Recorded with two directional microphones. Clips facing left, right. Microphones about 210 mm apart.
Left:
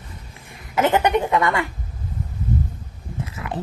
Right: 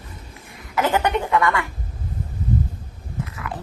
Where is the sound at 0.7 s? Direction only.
20° left (ahead or behind).